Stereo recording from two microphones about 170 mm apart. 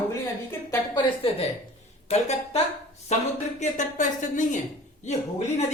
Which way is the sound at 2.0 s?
40° left (ahead or behind).